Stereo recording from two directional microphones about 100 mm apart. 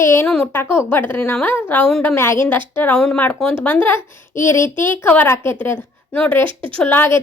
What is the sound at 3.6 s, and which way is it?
A woman's voice, 20° left (ahead or behind).